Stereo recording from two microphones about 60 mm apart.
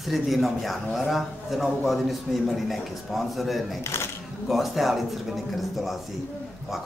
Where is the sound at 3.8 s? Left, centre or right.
Left.